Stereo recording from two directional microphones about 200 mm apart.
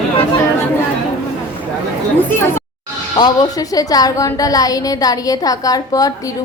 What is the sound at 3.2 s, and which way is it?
A woman's voice, 20° left (ahead or behind).